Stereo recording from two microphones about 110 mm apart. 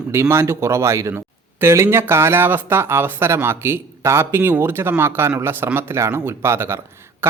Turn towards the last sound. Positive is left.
turn(degrees=-20)  # may be behind; listen again after turning